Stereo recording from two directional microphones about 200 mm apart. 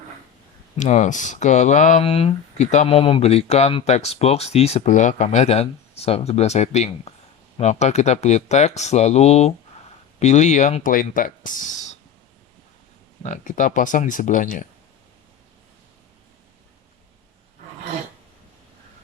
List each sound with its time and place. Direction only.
0.8 s speech: 35° left (ahead or behind)
13.2 s speech: 40° left (ahead or behind)